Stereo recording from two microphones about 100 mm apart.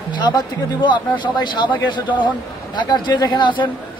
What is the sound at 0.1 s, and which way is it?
Speech, 45° left (ahead or behind).